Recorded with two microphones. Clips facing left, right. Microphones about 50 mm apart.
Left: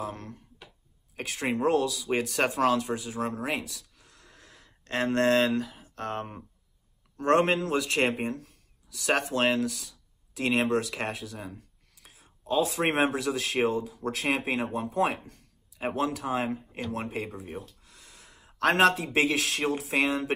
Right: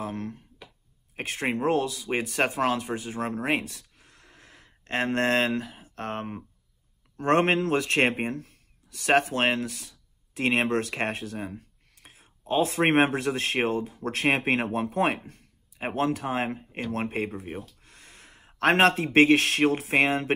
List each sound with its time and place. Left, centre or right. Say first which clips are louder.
0.0 s a man's voice: right 3 dB; right
15.2 s speech: right 3 dB; right
16.9 s speech: right 5 dB; right
17.8 s a sound: right 2 dB; right
18.6 s a man's voice: right 2 dB; right